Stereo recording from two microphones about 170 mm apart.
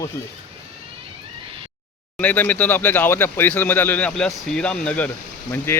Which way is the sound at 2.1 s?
10° left (ahead or behind).